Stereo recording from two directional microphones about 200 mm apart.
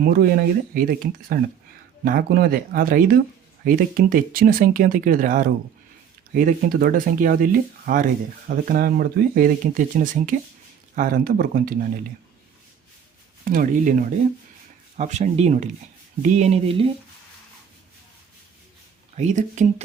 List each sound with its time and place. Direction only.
0.0 s speech: 50° right (ahead or behind)
13.4 s speech: 45° right (ahead or behind)
19.1 s speech: 35° right (ahead or behind)